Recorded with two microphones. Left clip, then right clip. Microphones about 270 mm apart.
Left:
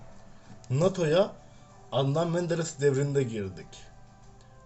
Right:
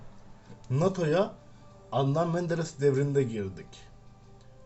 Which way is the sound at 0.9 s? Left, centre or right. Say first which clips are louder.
Left 2 dB; centre.